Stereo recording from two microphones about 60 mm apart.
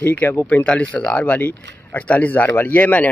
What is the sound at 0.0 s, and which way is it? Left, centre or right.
Speech, left.